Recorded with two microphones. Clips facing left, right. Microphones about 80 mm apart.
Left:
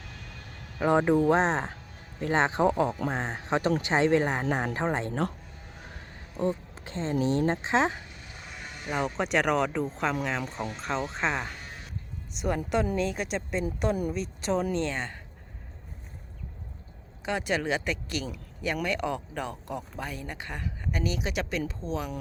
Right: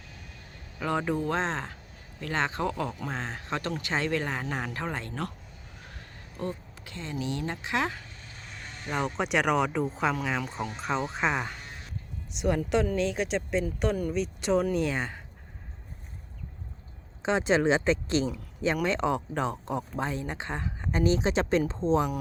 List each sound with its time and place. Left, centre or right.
0.8 s speech: left
6.3 s speech: left
8.4 s speech: centre
14.8 s speech: centre
17.2 s speech: right